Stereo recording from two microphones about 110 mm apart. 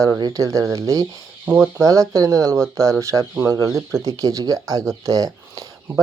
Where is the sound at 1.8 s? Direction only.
30° right (ahead or behind).